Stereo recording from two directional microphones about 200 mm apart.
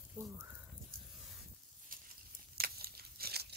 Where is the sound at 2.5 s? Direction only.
50° right (ahead or behind).